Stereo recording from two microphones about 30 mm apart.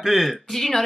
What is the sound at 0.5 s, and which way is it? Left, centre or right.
Speech, centre.